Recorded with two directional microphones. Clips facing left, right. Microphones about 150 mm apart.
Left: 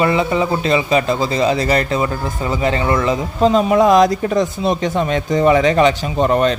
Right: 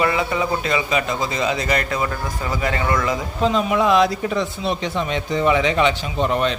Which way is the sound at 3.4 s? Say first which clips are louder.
Left 6 dB; 40° left (ahead or behind).